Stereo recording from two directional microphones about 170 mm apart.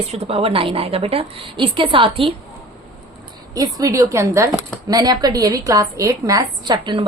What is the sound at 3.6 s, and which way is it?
A woman's voice, 20° right (ahead or behind).